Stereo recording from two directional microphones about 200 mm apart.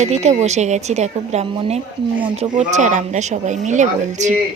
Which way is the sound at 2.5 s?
35° right (ahead or behind).